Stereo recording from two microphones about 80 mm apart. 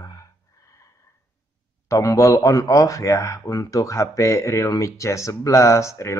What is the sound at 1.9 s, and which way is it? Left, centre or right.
Speech, left.